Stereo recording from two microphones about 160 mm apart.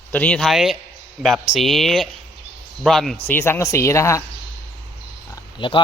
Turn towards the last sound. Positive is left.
turn(degrees=30)  # may be behind; listen again after turning